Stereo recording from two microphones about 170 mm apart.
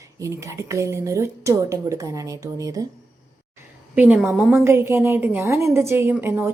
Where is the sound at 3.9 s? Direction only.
10° right (ahead or behind).